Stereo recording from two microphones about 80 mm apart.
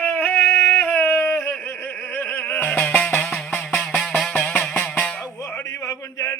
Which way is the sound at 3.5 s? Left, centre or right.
Centre.